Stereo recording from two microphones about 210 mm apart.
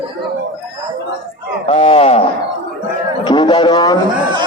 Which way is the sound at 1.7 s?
30° left (ahead or behind).